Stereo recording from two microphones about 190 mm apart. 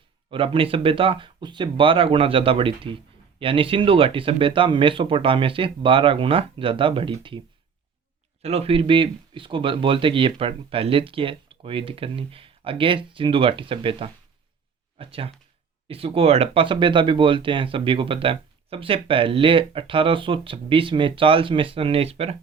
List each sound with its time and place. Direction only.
0.3 s speech: 30° right (ahead or behind)